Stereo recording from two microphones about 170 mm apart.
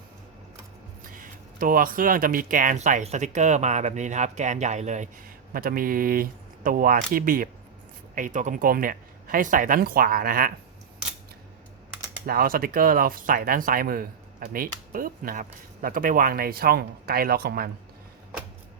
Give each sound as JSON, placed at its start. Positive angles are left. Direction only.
{"t": 1.1, "sound": "speech", "side_deg": -55}
{"t": 5.5, "sound": "speech", "side_deg": -55}
{"t": 12.2, "sound": "speech", "side_deg": -60}